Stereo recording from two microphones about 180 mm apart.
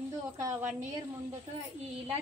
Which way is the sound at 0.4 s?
15° right (ahead or behind).